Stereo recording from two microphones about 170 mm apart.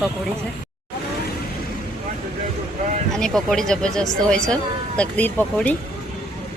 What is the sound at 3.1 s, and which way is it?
Speech, centre (ahead or behind).